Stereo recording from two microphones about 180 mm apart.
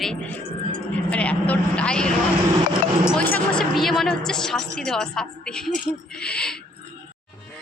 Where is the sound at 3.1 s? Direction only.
5° left (ahead or behind).